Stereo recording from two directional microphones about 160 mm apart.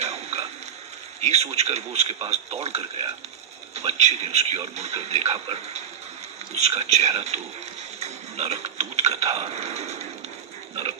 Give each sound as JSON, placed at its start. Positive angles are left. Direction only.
{"t": 0.0, "sound": "pig", "side_deg": -40}
{"t": 1.2, "sound": "a man's voice", "side_deg": -40}